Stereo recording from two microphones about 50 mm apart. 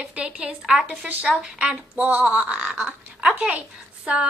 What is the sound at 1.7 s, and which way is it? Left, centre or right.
A woman's voice, right.